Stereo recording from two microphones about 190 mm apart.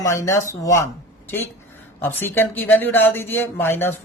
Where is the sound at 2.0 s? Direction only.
10° left (ahead or behind).